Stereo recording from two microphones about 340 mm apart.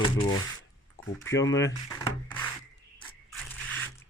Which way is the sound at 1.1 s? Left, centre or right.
Centre.